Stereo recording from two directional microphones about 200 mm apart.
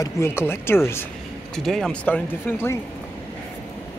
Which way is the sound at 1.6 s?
Centre (ahead or behind).